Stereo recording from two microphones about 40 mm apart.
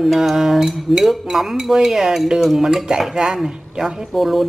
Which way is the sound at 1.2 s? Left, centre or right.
Centre.